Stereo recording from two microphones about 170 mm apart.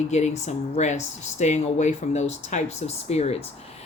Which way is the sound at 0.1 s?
45° left (ahead or behind).